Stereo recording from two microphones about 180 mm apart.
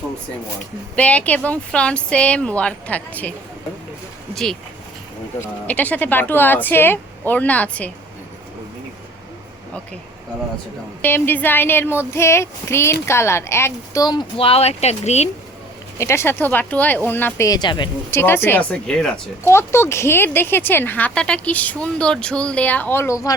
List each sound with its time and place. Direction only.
0.9 s speech: 5° left (ahead or behind)
5.6 s speech: 10° left (ahead or behind)
11.0 s speech: 10° left (ahead or behind); by 15.3 s 35° left (ahead or behind)
16.0 s speech: 15° left (ahead or behind)
18.2 s speech: 10° left (ahead or behind)